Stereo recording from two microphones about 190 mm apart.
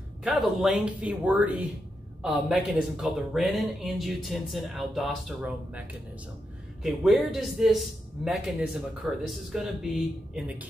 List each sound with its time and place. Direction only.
0.2 s a man's voice: centre (ahead or behind)